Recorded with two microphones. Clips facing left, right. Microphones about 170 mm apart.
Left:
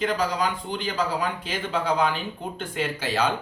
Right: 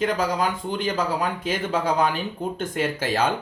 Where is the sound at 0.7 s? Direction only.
45° right (ahead or behind).